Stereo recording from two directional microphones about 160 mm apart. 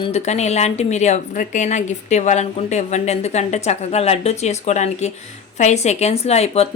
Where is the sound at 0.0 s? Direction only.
40° left (ahead or behind).